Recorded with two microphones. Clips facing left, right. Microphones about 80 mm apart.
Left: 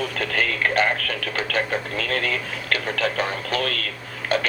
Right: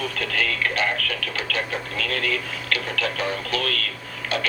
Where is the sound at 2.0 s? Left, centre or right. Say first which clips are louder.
Right 2 dB; left.